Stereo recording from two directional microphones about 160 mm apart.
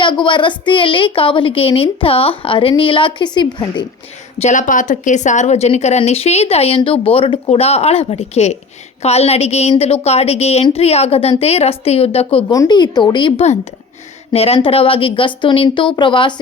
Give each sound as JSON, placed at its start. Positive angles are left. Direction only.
{"t": 0.0, "sound": "a woman's voice", "side_deg": 30}
{"t": 4.4, "sound": "a woman's voice", "side_deg": 50}